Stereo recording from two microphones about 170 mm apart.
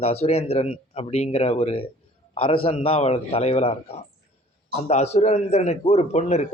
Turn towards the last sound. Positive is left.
turn(degrees=40)  # may be behind; listen again after turning